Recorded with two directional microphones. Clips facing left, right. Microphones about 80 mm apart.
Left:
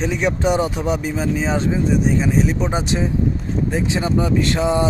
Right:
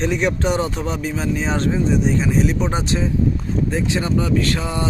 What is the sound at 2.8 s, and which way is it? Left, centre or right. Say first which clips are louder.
Speech: even; left.